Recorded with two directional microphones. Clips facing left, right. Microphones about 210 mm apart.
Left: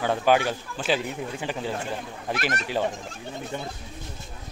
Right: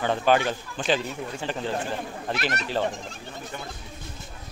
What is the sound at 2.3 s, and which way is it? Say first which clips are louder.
Speech: left 1 dB; 50° left (ahead or behind).